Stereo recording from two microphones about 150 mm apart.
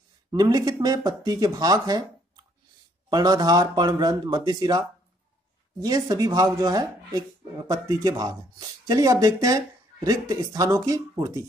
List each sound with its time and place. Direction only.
0.3 s speech: 25° right (ahead or behind)
3.1 s speech: 25° right (ahead or behind)